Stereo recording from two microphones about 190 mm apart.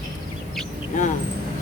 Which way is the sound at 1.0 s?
40° left (ahead or behind).